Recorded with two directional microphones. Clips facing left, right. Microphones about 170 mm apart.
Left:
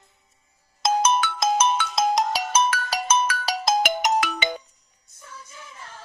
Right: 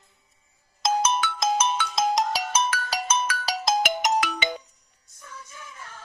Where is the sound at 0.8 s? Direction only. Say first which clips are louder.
Left 3 dB; 55° left (ahead or behind).